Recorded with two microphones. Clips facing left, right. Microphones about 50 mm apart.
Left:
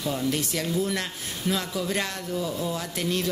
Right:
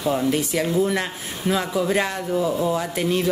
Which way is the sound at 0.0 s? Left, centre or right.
Right.